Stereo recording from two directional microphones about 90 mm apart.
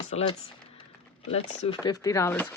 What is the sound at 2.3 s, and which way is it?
Speech, 20° left (ahead or behind).